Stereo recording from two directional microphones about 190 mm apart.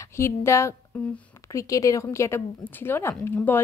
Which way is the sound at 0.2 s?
15° left (ahead or behind).